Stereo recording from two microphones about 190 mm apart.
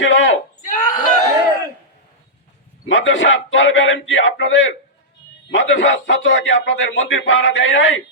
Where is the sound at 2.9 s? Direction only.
75° left (ahead or behind).